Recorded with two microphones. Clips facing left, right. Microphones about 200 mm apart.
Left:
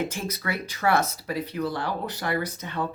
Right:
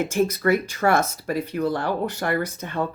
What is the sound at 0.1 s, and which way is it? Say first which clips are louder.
Speech: right 11 dB; 45° right (ahead or behind).